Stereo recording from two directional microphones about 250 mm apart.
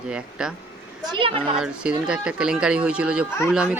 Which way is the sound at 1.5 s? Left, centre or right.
Centre.